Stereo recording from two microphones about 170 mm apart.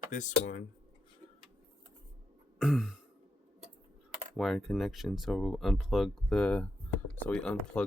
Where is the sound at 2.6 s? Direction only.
5° right (ahead or behind).